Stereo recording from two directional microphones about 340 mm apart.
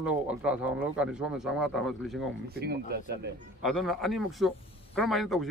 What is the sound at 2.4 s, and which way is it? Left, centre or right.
Speech, right.